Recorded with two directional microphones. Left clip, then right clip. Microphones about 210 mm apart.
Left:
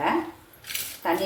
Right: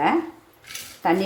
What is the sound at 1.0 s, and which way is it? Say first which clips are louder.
Speech: right 5 dB; 50° right (ahead or behind).